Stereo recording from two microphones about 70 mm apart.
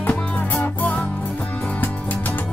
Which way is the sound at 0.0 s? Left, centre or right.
Left.